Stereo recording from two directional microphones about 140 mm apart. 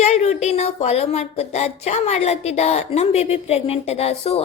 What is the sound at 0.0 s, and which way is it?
Speech, 50° left (ahead or behind).